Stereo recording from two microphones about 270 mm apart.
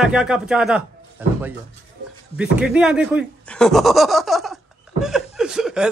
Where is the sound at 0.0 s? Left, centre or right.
Centre.